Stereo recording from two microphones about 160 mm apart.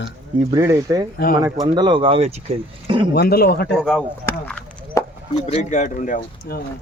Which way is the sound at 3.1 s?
80° left.